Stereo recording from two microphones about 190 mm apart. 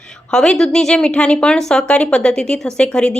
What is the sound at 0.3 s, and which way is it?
Speech, 5° left (ahead or behind).